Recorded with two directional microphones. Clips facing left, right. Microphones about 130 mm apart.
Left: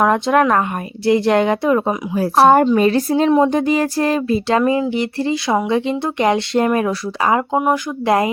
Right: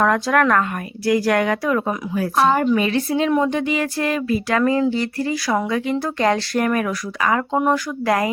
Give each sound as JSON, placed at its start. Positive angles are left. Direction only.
{"t": 0.0, "sound": "speech", "side_deg": 20}